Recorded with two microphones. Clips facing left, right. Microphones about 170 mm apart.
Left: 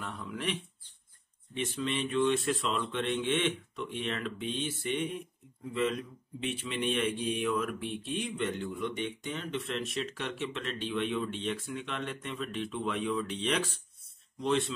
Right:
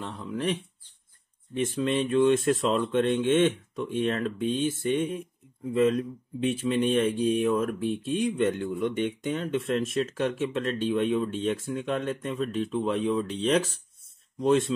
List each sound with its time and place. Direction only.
0.2 s speech: 35° right (ahead or behind)
1.5 s speech: 50° right (ahead or behind)